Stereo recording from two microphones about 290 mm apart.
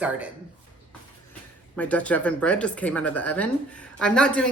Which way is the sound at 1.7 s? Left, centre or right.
Centre.